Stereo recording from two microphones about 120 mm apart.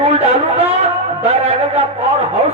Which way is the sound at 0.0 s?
55° right (ahead or behind).